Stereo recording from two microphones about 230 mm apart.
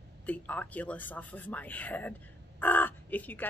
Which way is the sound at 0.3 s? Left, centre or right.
Centre.